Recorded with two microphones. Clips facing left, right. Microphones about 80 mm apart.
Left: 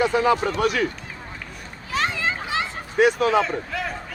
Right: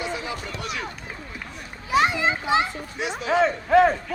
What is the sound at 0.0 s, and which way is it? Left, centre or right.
Speech, left.